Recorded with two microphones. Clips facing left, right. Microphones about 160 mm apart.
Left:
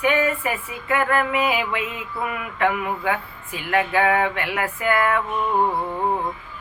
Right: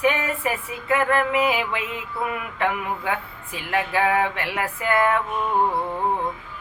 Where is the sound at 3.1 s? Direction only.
25° right (ahead or behind).